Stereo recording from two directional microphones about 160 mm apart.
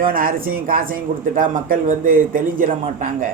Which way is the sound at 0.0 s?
60° right (ahead or behind).